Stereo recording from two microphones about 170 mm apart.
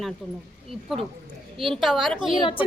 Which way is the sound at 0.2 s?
Centre (ahead or behind).